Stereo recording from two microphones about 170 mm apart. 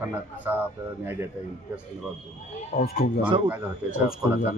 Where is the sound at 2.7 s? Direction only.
60° left (ahead or behind).